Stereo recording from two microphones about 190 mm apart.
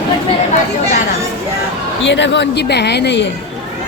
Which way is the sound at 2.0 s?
70° left (ahead or behind).